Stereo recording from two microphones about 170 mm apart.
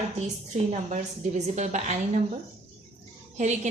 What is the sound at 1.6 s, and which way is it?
Speech, 45° right (ahead or behind).